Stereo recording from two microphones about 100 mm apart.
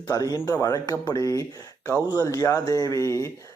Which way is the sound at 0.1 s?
35° left (ahead or behind).